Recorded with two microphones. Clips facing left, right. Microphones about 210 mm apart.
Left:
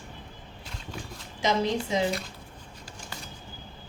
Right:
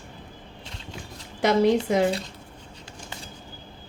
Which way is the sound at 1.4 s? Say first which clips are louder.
Right 7 dB; 60° right (ahead or behind).